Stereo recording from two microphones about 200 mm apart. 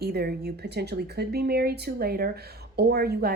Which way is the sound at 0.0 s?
50° right (ahead or behind).